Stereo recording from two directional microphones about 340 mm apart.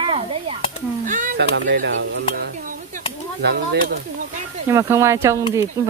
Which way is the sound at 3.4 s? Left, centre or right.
Right.